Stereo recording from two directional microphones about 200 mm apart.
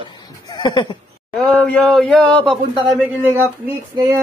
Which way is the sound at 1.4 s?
5° left (ahead or behind).